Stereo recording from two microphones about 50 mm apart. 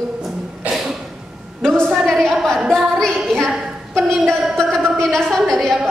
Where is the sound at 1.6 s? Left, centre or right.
Centre.